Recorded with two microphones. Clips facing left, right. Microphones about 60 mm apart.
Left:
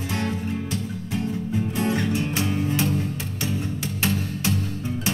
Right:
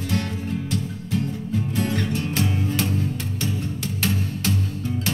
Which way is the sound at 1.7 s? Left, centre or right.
Centre.